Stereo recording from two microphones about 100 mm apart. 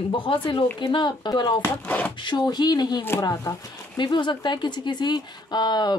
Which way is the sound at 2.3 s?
45° left (ahead or behind).